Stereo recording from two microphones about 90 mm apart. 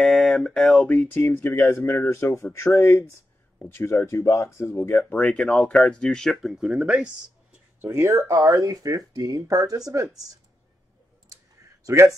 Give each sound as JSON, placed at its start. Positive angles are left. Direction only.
{"t": 0.0, "sound": "a sound", "side_deg": 5}
{"t": 0.8, "sound": "speech", "side_deg": 20}
{"t": 4.9, "sound": "speech", "side_deg": 10}
{"t": 6.5, "sound": "speech", "side_deg": -5}
{"t": 7.8, "sound": "speech", "side_deg": -25}
{"t": 8.1, "sound": "speech", "side_deg": -35}
{"t": 11.8, "sound": "speech", "side_deg": -35}